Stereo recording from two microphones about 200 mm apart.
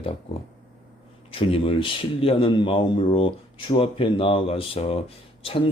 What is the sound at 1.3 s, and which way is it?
Speech, 25° left (ahead or behind).